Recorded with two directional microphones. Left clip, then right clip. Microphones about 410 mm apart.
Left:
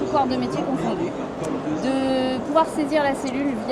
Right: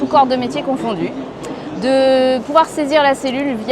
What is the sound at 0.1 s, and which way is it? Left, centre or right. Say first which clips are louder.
Speech: right 10 dB; right.